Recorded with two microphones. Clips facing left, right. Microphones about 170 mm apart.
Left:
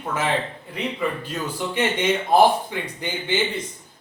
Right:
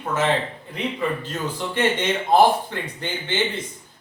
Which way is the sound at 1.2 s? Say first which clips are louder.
Even; 10° left (ahead or behind).